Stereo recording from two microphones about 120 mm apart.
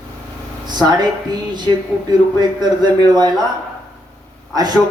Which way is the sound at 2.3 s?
35° right (ahead or behind).